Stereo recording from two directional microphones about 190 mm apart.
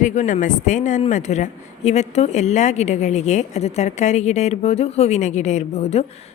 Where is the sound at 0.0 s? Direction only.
40° left (ahead or behind).